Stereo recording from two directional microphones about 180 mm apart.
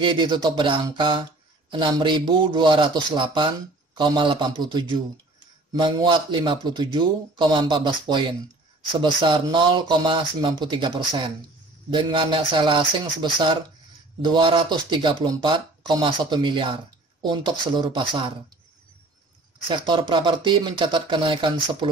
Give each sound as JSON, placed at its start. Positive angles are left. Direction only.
{"t": 0.0, "sound": "speech", "side_deg": -25}
{"t": 19.7, "sound": "speech", "side_deg": -25}